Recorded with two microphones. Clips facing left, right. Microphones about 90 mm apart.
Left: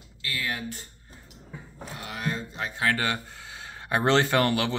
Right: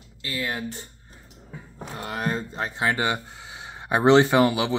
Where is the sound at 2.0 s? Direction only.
40° right (ahead or behind).